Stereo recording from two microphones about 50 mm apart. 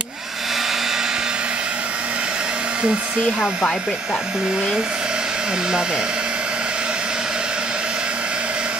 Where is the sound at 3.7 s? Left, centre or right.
Centre.